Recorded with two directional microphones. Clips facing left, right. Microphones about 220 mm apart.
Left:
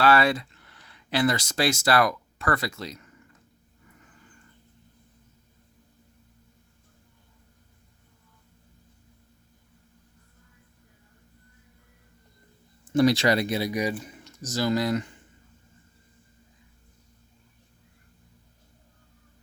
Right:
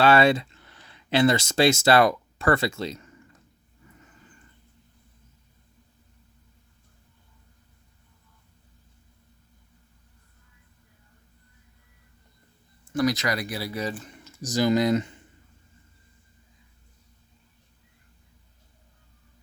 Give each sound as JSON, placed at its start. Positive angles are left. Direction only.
{"t": 0.0, "sound": "speech", "side_deg": -25}
{"t": 12.8, "sound": "speech", "side_deg": 25}
{"t": 14.4, "sound": "speech", "side_deg": -15}